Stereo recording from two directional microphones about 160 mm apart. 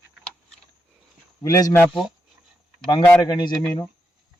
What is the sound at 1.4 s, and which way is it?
Speech, 20° left (ahead or behind).